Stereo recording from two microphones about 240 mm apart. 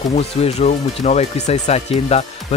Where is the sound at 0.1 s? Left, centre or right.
Left.